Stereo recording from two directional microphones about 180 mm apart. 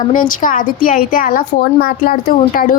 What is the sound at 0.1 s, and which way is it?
Speech, 50° left (ahead or behind).